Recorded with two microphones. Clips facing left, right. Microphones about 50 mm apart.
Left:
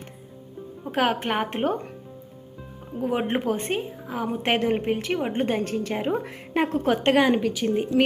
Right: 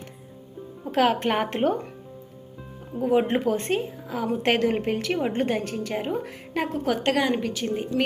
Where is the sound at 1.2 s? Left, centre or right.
Centre.